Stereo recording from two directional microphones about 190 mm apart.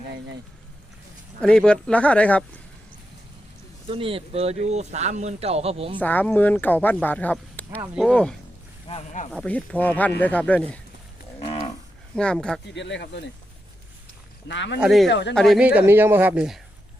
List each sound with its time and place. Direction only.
1.4 s speech: 5° left (ahead or behind)
3.8 s speech: 30° right (ahead or behind)
6.0 s speech: 10° left (ahead or behind)
8.9 s speech: 35° left (ahead or behind)
9.3 s speech: 5° left (ahead or behind)
11.3 s livestock: 30° left (ahead or behind)
12.1 s speech: 5° left (ahead or behind)
12.7 s speech: 70° left (ahead or behind)
14.4 s speech: 65° left (ahead or behind)
14.8 s speech: 5° right (ahead or behind)
15.0 s speech: 65° left (ahead or behind)
15.4 s speech: centre (ahead or behind)